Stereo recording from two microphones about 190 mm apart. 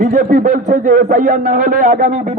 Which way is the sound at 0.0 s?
40° right (ahead or behind).